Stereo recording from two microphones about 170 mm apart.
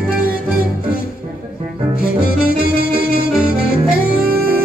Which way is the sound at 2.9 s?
65° right (ahead or behind).